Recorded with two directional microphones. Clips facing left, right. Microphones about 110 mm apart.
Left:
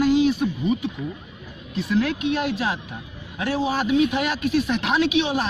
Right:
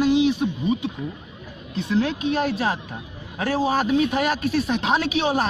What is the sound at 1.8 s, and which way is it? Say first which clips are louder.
A man's voice: even; 30° right (ahead or behind).